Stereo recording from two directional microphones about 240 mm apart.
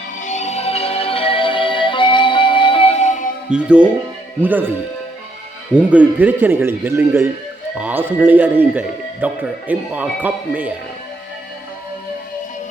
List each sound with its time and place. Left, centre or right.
0.2 s music: left
3.5 s speech: centre
5.7 s speech: centre